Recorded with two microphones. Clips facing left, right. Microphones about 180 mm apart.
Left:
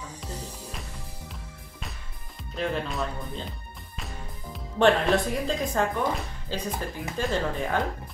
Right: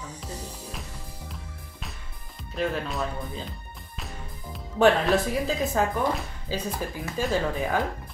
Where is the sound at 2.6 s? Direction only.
Centre (ahead or behind).